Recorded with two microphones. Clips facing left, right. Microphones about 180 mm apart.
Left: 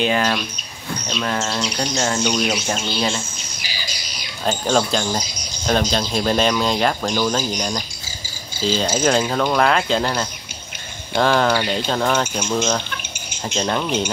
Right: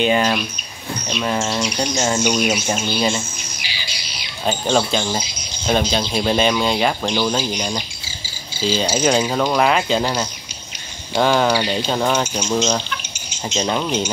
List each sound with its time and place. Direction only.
0.0 s speech: 5° right (ahead or behind)
3.6 s squawk: 45° left (ahead or behind)
4.5 s speech: 5° right (ahead or behind)
8.6 s speech: 5° right (ahead or behind)
13.6 s speech: 10° right (ahead or behind)